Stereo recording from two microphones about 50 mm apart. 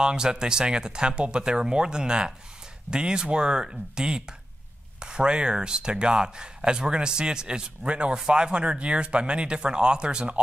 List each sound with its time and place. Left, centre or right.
0.0 s speech: centre